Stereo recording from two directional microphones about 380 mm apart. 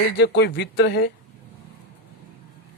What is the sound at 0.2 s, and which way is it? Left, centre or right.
Speech, left.